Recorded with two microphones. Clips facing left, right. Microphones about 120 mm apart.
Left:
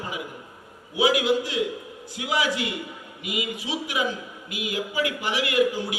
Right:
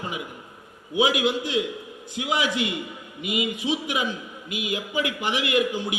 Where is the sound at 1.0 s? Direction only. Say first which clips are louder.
Left 1 dB; 20° right (ahead or behind).